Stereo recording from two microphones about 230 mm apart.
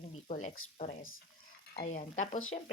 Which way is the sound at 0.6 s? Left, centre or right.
Left.